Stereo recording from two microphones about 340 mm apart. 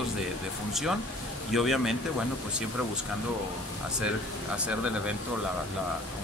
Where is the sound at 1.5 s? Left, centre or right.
Centre.